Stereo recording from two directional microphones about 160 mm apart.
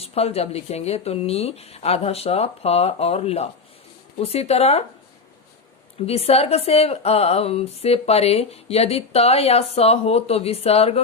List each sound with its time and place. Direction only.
0.0 s speech: 40° left (ahead or behind)
6.0 s speech: 40° left (ahead or behind)